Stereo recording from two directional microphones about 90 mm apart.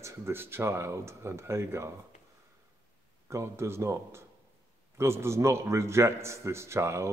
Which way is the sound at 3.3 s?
30° right (ahead or behind).